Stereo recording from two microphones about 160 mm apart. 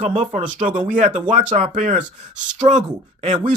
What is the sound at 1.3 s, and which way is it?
Speech, 50° right (ahead or behind).